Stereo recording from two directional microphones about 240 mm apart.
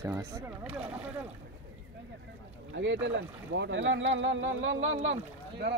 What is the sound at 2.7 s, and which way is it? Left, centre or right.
Speech, right.